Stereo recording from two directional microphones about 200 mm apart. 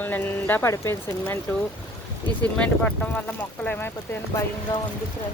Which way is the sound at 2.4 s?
5° left (ahead or behind).